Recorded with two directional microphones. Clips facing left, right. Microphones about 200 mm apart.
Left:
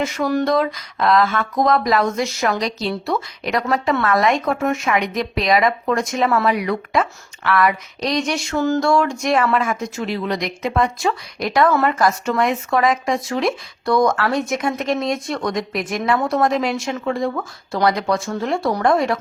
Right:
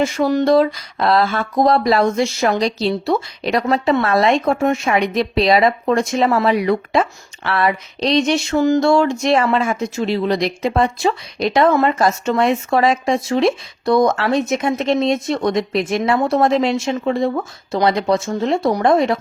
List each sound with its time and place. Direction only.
0.0 s a woman's voice: 30° right (ahead or behind)